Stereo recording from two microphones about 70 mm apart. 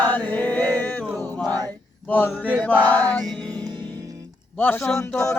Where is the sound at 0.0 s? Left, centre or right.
Left.